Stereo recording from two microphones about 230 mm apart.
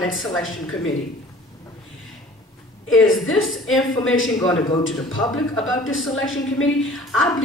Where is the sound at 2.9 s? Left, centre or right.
Left.